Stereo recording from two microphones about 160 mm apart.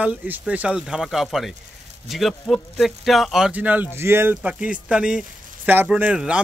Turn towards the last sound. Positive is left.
turn(degrees=-5)  # may be behind; listen again after turning